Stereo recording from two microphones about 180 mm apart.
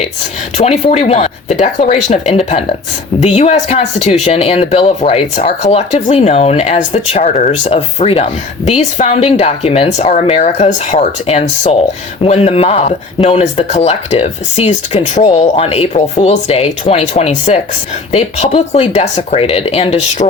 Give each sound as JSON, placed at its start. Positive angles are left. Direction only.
{"t": 0.5, "sound": "speech", "side_deg": 35}